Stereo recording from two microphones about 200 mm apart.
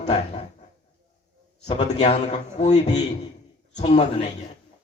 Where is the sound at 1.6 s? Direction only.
35° left (ahead or behind).